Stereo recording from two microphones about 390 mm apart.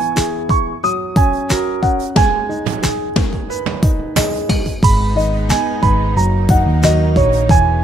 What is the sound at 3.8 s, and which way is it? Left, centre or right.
Music, centre.